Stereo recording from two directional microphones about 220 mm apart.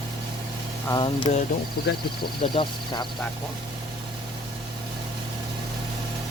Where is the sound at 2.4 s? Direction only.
20° left (ahead or behind).